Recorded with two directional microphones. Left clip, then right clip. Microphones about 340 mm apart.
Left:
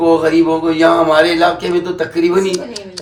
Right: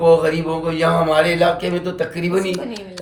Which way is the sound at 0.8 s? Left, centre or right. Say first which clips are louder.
Left 5 dB; centre.